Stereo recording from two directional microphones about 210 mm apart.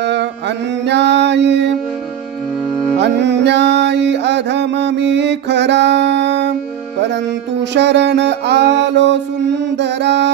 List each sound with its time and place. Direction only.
0.0 s mantra: 55° right (ahead or behind)
3.0 s music: 55° right (ahead or behind)
7.7 s music: 55° right (ahead or behind)